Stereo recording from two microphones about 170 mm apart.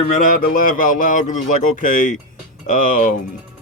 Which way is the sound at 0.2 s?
55° left (ahead or behind).